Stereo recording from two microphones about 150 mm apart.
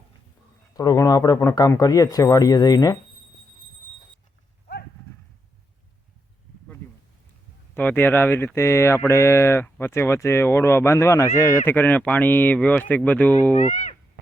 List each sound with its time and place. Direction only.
0.7 s speech: 25° left (ahead or behind)
7.8 s speech: 10° left (ahead or behind)
13.6 s speech: 55° left (ahead or behind)